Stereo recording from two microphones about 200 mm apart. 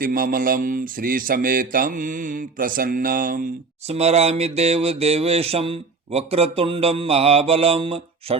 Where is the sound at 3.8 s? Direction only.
30° right (ahead or behind).